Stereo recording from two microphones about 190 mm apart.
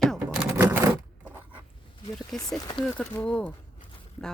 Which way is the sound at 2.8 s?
5° left (ahead or behind).